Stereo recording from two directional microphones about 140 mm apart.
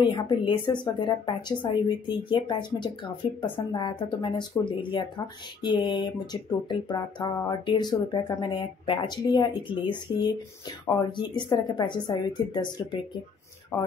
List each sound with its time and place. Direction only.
0.0 s speech: 35° left (ahead or behind)
13.7 s speech: 15° left (ahead or behind)